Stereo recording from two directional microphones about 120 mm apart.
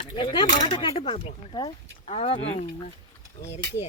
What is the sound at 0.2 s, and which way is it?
Speech, 45° left (ahead or behind).